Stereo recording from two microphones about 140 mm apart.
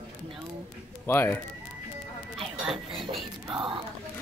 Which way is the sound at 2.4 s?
Centre (ahead or behind).